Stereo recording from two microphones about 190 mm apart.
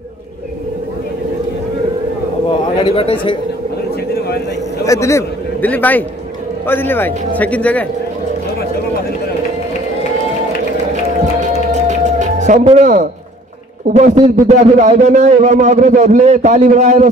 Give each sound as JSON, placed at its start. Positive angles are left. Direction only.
{"t": 2.8, "sound": "speech", "side_deg": 30}
{"t": 4.8, "sound": "a man's voice", "side_deg": 15}
{"t": 11.3, "sound": "music", "side_deg": -40}
{"t": 12.6, "sound": "a man's voice", "side_deg": -40}